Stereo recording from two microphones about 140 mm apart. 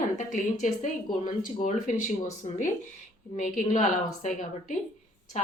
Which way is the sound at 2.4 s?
45° left (ahead or behind).